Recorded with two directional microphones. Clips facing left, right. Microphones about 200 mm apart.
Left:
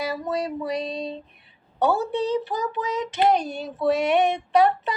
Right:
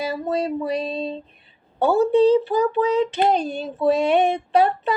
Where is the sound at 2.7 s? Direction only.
30° right (ahead or behind).